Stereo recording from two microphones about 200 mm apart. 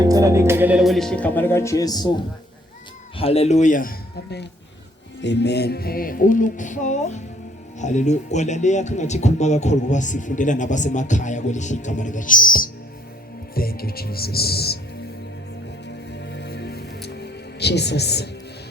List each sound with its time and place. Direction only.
0.0 s speech: 15° right (ahead or behind); by 4.4 s 50° left (ahead or behind)
5.2 s music: 60° left (ahead or behind); by 7.2 s 35° left (ahead or behind)
7.8 s speech: 35° left (ahead or behind)
13.5 s music: 50° left (ahead or behind)
16.1 s music: 60° left (ahead or behind)